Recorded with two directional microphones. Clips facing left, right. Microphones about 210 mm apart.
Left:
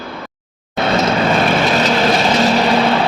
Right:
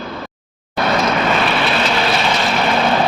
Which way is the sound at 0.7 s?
25° left (ahead or behind).